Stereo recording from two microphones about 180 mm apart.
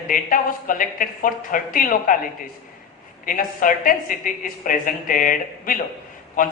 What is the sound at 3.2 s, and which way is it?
A woman's voice, 50° left (ahead or behind).